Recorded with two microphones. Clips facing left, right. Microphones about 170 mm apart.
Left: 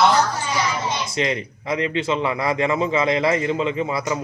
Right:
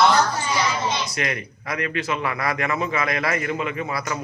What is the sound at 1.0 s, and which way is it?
A man's voice, 25° left (ahead or behind).